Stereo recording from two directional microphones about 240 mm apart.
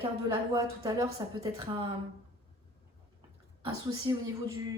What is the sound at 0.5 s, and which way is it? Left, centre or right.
A woman's voice, centre.